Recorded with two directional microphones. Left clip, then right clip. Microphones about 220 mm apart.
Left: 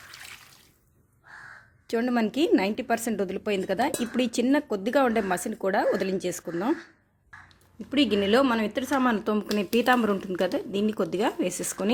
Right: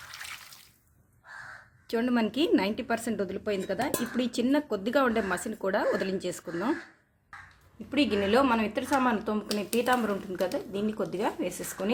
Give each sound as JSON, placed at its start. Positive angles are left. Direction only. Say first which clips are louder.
{"t": 0.1, "sound": "water", "louder": "right 3 dB", "side_deg": 0}
{"t": 1.9, "sound": "a woman's voice", "louder": "left 2 dB", "side_deg": 25}
{"t": 7.9, "sound": "a woman's voice", "louder": "left 3 dB", "side_deg": 25}